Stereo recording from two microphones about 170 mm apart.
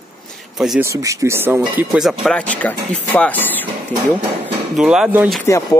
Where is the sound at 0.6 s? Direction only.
Centre (ahead or behind).